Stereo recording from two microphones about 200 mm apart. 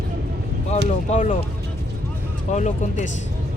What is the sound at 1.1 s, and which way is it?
Music, 35° left (ahead or behind).